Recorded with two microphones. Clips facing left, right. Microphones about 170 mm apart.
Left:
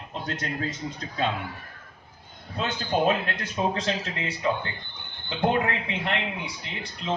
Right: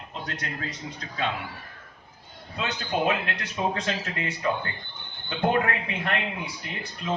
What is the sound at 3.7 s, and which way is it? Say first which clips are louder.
A man's voice: left 1 dB; 30° left (ahead or behind).